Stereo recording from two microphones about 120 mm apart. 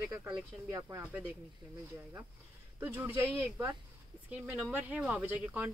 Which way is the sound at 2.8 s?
15° right (ahead or behind).